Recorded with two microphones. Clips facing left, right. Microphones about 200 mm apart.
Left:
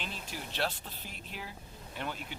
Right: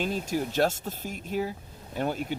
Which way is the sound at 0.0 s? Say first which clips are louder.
Right 14 dB; 45° right (ahead or behind).